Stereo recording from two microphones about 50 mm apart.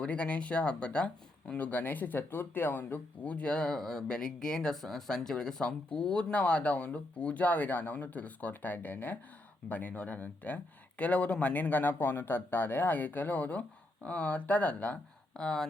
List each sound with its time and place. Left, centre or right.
0.0 s speech: left
3.2 s speech: left
3.8 s speech: centre; by 14.9 s left
15.4 s speech: centre